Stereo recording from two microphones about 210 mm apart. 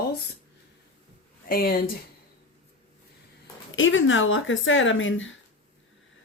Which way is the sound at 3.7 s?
65° left (ahead or behind).